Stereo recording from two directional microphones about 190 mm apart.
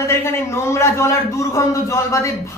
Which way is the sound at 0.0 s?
10° left (ahead or behind).